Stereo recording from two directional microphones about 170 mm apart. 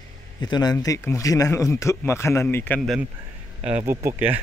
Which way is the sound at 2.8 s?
Centre (ahead or behind).